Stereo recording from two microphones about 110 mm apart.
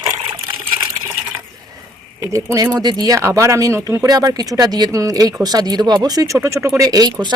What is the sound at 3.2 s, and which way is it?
Speech, 25° right (ahead or behind).